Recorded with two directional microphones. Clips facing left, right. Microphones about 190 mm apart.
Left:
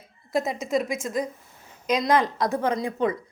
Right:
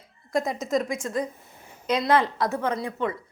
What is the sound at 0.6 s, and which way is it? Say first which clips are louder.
Speech: even; 5° left (ahead or behind).